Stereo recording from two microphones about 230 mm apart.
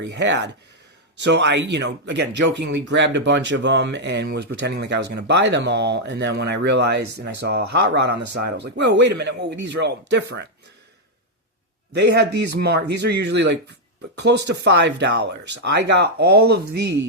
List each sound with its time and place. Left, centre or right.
0.0 s speech: right
11.9 s speech: right